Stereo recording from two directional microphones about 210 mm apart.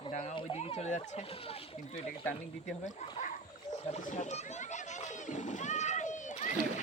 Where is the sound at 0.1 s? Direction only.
30° left (ahead or behind).